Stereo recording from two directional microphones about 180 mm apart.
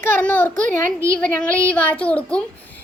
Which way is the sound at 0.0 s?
10° left (ahead or behind).